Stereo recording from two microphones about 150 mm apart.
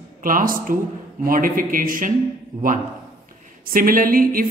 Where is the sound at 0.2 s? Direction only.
65° right (ahead or behind).